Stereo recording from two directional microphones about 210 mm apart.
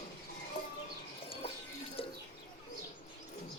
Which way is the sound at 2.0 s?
25° left (ahead or behind).